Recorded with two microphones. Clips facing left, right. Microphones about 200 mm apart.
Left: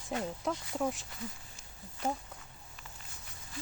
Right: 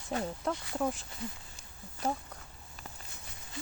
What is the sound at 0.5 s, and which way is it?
Speech, centre (ahead or behind).